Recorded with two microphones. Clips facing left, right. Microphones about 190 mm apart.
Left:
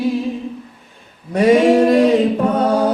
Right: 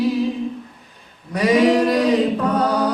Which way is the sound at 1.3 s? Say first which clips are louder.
Left 4 dB; 25° left (ahead or behind).